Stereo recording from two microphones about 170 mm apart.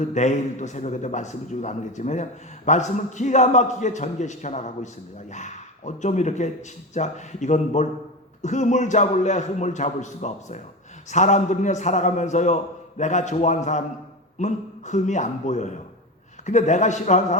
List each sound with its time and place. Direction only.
0.0 s a man's voice: 45° left (ahead or behind)